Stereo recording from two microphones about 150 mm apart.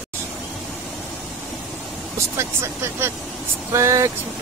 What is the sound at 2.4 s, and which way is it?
Speech, 15° right (ahead or behind).